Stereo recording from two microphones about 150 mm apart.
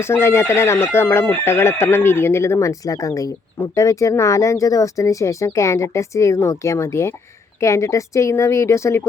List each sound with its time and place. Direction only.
0.0 s speech: 15° left (ahead or behind)